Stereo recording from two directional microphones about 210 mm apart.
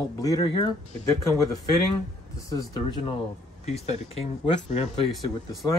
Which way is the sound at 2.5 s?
20° left (ahead or behind).